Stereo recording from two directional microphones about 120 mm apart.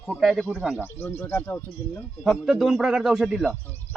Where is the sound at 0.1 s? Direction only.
Centre (ahead or behind).